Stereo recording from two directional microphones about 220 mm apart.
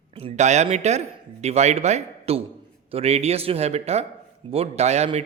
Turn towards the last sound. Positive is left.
turn(degrees=-30)  # may be behind; listen again after turning